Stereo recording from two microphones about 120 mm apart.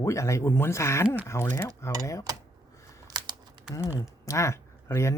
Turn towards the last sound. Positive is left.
turn(degrees=25)  # may be behind; listen again after turning